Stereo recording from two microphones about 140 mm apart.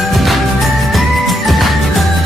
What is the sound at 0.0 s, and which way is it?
Music, centre (ahead or behind).